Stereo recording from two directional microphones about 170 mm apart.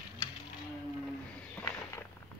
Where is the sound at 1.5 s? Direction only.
15° left (ahead or behind).